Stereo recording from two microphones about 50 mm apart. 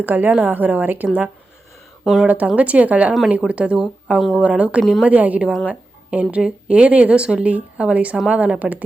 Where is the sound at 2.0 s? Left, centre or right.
Centre.